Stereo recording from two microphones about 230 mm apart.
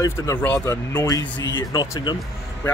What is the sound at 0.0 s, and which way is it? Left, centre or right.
Speech, centre.